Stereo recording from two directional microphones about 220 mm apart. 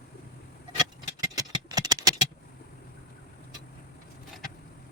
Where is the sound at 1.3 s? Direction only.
15° right (ahead or behind).